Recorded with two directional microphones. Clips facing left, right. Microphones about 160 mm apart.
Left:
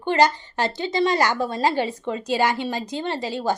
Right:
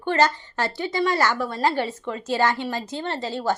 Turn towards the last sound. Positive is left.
turn(degrees=15)  # may be behind; listen again after turning